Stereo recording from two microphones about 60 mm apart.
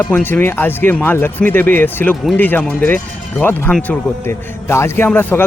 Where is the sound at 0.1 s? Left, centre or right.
Left.